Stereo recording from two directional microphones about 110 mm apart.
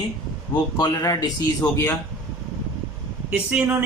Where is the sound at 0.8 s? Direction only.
35° left (ahead or behind).